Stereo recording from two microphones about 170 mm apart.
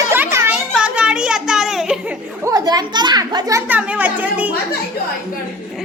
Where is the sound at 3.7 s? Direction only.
10° right (ahead or behind).